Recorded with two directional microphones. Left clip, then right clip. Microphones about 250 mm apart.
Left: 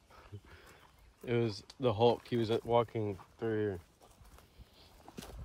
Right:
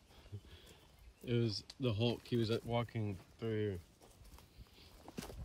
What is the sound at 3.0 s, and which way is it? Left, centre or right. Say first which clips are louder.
Speech: left 8 dB; left.